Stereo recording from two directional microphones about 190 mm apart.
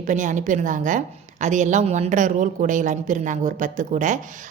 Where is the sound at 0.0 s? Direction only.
40° right (ahead or behind).